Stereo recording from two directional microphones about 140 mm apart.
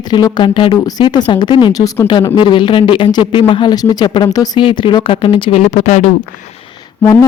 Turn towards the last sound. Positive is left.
turn(degrees=25)  # may be behind; listen again after turning